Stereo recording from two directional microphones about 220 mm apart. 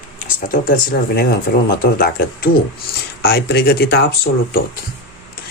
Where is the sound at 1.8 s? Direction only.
40° left (ahead or behind).